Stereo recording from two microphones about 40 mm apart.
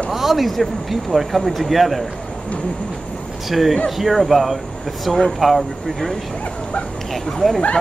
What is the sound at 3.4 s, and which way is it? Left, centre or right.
Speech, centre.